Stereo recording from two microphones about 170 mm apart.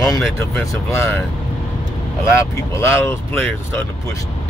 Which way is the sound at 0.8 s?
15° left (ahead or behind).